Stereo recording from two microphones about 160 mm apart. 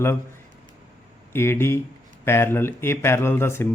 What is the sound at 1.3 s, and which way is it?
Speech, 15° left (ahead or behind).